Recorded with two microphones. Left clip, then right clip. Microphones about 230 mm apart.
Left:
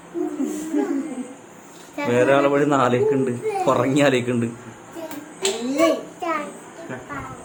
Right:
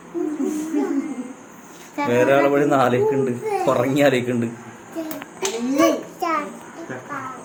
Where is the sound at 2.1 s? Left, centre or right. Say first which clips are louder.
Right 1 dB; centre.